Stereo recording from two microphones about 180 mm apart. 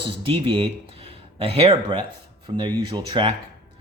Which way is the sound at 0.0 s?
30° right (ahead or behind).